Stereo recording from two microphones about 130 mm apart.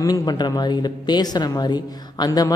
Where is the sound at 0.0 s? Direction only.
30° left (ahead or behind).